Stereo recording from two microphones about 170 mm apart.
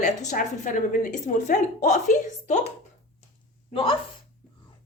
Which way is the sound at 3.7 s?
30° left (ahead or behind).